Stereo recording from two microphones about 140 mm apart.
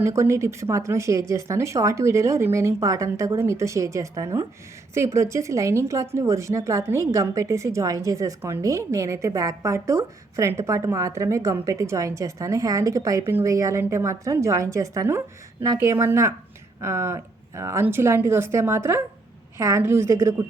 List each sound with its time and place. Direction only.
0.0 s a woman's voice: 20° right (ahead or behind)